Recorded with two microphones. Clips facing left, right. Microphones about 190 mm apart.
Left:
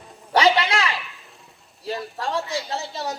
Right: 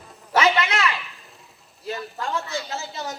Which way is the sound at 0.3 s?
30° left (ahead or behind).